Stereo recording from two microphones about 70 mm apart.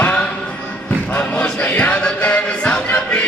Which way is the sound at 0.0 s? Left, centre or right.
Centre.